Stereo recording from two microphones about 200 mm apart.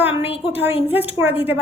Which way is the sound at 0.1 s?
30° left (ahead or behind).